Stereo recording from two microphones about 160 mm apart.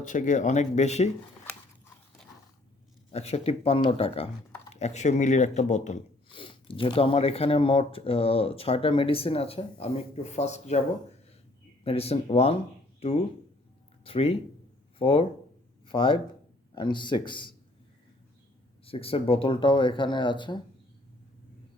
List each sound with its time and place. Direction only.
0.0 s speech: 55° left (ahead or behind)
3.1 s speech: 40° left (ahead or behind)
6.3 s speech: 35° left (ahead or behind)
18.9 s speech: 35° left (ahead or behind)